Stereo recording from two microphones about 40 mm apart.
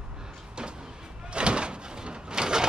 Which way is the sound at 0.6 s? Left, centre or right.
Right.